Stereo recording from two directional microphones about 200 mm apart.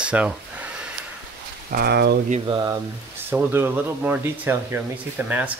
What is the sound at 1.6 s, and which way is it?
Speech, 50° right (ahead or behind).